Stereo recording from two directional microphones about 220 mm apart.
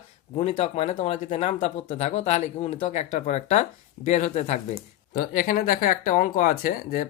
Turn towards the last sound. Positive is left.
turn(degrees=40)  # may be behind; listen again after turning